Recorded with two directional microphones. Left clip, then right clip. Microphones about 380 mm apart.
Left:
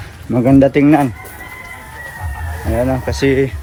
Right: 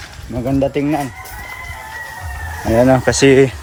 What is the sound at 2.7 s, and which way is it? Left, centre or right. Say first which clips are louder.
Speech: right 6 dB; right.